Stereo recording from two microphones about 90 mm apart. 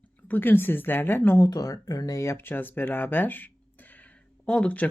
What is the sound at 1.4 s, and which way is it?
Speech, 40° left (ahead or behind).